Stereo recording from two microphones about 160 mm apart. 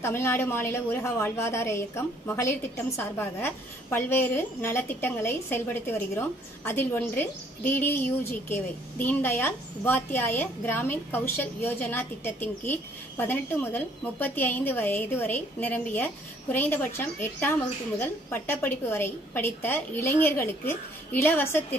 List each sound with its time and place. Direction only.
0.0 s a woman's voice: 15° left (ahead or behind)